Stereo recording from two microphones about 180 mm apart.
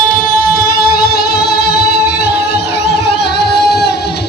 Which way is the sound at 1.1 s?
60° left (ahead or behind).